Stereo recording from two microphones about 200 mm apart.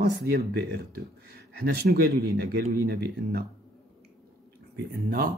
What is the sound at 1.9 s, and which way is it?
Speech, 50° right (ahead or behind).